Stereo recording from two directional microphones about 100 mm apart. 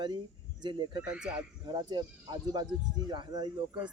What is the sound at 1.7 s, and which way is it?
Speech, 45° right (ahead or behind).